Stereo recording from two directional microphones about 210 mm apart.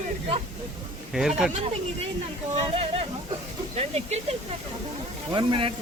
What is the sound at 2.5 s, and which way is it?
Speech, 25° right (ahead or behind).